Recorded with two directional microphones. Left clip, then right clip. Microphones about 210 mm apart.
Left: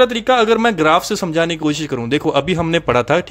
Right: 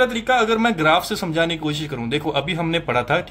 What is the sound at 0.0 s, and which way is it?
A man's voice, 50° left (ahead or behind).